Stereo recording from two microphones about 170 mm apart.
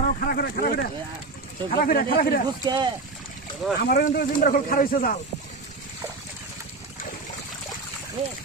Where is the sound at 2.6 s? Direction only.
25° right (ahead or behind).